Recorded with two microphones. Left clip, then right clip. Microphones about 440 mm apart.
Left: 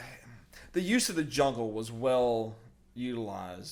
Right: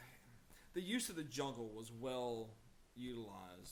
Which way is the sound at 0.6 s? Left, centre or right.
Left.